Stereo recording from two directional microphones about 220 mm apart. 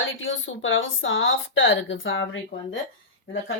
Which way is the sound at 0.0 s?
60° left (ahead or behind).